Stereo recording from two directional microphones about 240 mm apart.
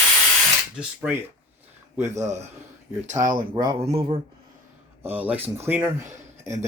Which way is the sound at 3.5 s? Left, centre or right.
Centre.